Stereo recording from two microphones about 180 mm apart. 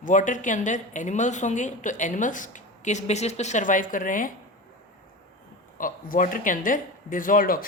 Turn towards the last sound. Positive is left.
turn(degrees=55)  # may be behind; listen again after turning